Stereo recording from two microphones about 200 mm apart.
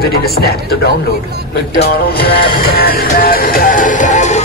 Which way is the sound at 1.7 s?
50° left (ahead or behind).